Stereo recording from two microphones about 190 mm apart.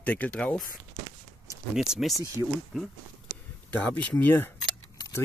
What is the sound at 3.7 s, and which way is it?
Speech, 10° left (ahead or behind).